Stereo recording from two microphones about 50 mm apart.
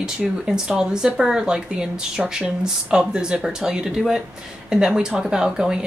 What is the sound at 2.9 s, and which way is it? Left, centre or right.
Speech, centre.